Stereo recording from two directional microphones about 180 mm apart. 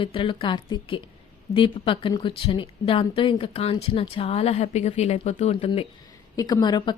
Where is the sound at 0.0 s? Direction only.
30° left (ahead or behind).